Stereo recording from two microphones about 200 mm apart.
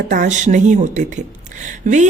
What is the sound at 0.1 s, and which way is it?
A woman's voice, 35° right (ahead or behind).